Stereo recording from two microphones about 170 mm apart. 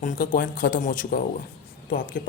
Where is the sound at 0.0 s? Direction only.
50° left (ahead or behind).